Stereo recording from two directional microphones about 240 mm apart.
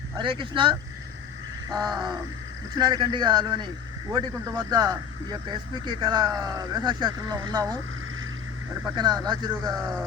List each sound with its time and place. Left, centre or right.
0.2 s a man's voice: right
9.0 s speech: centre